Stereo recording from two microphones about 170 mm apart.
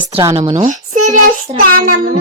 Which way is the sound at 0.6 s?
45° right (ahead or behind).